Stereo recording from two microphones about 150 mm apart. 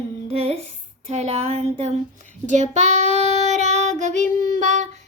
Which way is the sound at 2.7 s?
50° right (ahead or behind).